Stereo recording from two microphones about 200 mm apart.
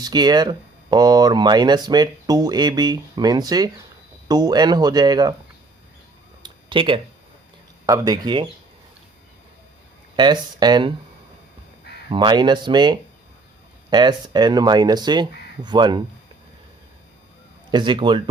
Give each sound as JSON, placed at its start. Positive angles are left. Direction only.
{"t": 0.0, "sound": "speech", "side_deg": -20}
{"t": 6.4, "sound": "a sound", "side_deg": -25}
{"t": 7.9, "sound": "speech", "side_deg": -15}
{"t": 10.2, "sound": "speech", "side_deg": -20}
{"t": 12.1, "sound": "speech", "side_deg": -25}
{"t": 17.7, "sound": "speech", "side_deg": -25}